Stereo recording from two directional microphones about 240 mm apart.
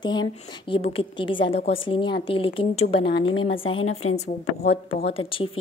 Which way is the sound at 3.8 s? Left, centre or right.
Left.